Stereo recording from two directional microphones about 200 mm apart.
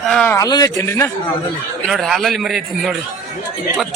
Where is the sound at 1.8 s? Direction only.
Centre (ahead or behind).